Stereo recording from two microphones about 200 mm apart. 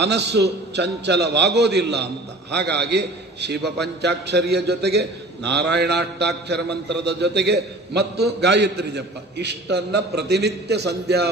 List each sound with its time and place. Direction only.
0.0 s a man's voice: 55° right (ahead or behind)